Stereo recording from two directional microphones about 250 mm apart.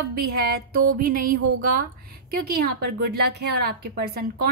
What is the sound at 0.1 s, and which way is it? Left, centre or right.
A woman's voice, right.